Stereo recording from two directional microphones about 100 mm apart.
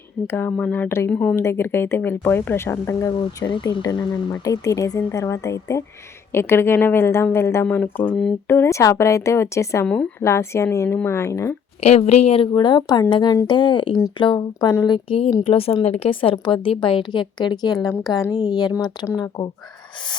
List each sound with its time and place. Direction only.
0.3 s speech: 20° left (ahead or behind)
1.1 s speech: 10° left (ahead or behind)
1.4 s speech: 25° left (ahead or behind)
3.2 s speech: 50° left (ahead or behind)
3.9 s speech: 35° left (ahead or behind); by 8.1 s 20° left (ahead or behind)
8.1 s speech: 5° left (ahead or behind)
8.4 s speech: 25° left (ahead or behind)
9.8 s speech: 10° left (ahead or behind)
10.2 s speech: 25° left (ahead or behind)
11.8 s speech: 90° left
12.5 s speech: 50° left (ahead or behind)
14.8 s a woman's voice: 60° left (ahead or behind)
15.4 s a woman's voice: 75° left (ahead or behind); by 19.5 s 40° left (ahead or behind)